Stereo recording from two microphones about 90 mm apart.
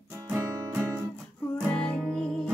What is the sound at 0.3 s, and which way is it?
Music, 25° right (ahead or behind).